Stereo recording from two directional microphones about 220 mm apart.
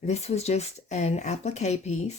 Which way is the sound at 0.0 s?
30° left (ahead or behind).